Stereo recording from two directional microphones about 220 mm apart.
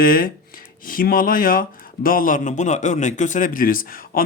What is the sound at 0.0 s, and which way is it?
A man's voice, 40° left (ahead or behind).